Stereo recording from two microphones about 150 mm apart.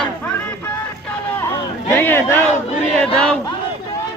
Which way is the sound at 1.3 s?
15° left (ahead or behind).